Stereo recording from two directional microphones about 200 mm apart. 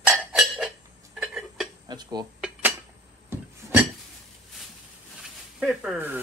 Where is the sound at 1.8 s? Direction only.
20° right (ahead or behind).